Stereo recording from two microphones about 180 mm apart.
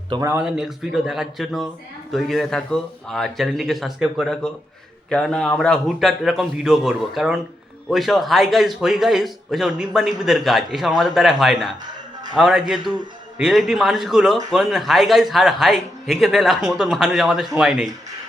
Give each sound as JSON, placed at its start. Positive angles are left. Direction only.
{"t": 0.1, "sound": "speech", "side_deg": -20}
{"t": 0.3, "sound": "a man's voice", "side_deg": -5}